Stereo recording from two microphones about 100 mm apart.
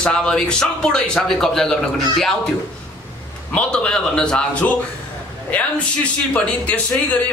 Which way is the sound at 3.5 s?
10° left (ahead or behind).